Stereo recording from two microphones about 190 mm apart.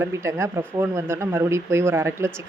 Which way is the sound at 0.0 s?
15° right (ahead or behind).